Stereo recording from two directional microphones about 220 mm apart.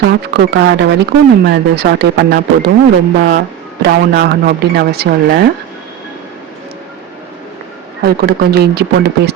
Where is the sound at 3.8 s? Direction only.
45° right (ahead or behind).